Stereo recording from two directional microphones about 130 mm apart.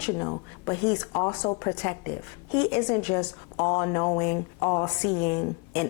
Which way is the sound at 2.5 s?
20° left (ahead or behind).